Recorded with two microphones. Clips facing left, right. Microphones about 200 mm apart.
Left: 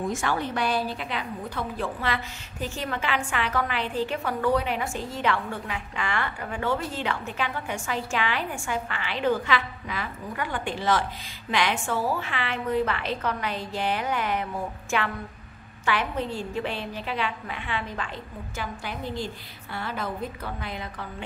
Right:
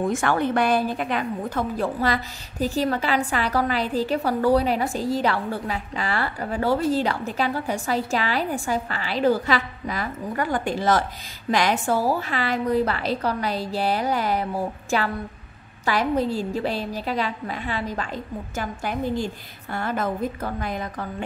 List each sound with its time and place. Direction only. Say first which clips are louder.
0.0 s a woman's voice: right 5 dB; 55° right (ahead or behind)